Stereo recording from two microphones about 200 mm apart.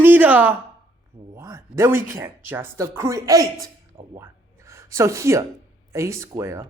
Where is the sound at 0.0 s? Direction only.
10° right (ahead or behind).